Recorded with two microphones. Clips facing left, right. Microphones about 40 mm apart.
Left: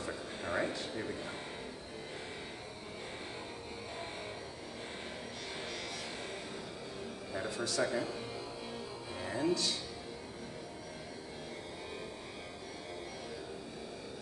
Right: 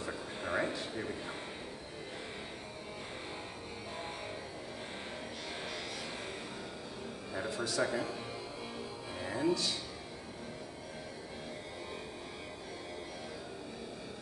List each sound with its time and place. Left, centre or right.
0.0 s a sound: centre
7.3 s speech: centre
9.2 s music: centre